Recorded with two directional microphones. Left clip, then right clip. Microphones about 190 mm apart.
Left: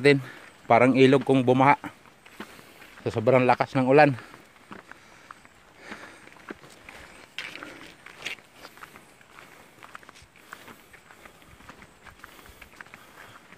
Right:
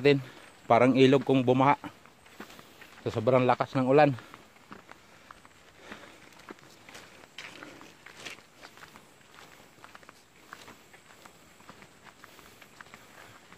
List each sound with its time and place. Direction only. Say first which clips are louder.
0.0 s a man's voice: left 4 dB; 20° left (ahead or behind)
3.0 s speech: left 4 dB; 15° left (ahead or behind)